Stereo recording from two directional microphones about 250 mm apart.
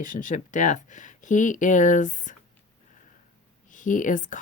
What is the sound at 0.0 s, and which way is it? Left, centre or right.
Speech, left.